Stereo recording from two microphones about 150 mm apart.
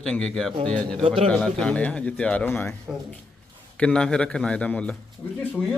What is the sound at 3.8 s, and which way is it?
A man's voice, 5° left (ahead or behind).